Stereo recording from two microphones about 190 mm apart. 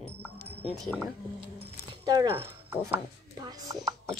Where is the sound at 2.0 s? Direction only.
20° right (ahead or behind).